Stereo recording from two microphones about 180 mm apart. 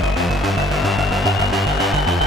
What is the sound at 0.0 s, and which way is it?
Music, centre (ahead or behind).